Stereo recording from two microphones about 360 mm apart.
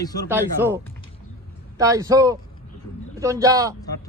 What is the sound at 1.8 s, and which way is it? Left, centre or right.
A man's voice, centre.